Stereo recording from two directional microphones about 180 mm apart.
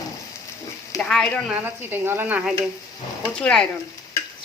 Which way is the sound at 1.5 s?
10° right (ahead or behind).